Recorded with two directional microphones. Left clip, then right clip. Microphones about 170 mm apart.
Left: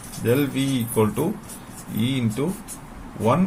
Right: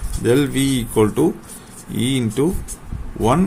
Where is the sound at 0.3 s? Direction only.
65° right (ahead or behind).